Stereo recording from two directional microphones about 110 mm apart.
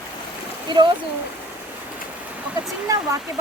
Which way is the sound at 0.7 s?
45° right (ahead or behind).